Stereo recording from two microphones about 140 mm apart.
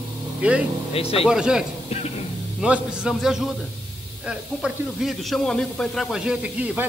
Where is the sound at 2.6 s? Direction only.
5° right (ahead or behind).